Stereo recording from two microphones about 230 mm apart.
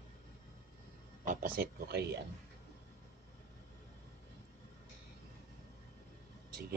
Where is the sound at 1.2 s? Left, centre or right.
Right.